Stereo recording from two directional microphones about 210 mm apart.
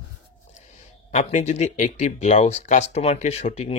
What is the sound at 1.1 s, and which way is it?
Speech, 35° left (ahead or behind).